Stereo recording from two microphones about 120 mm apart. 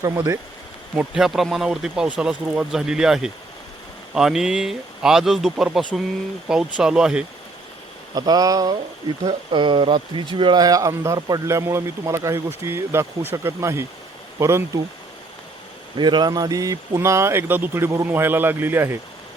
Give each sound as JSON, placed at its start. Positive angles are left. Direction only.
{"t": 0.0, "sound": "speech", "side_deg": -25}
{"t": 0.9, "sound": "speech", "side_deg": -5}
{"t": 8.1, "sound": "speech", "side_deg": -30}
{"t": 16.0, "sound": "speech", "side_deg": -40}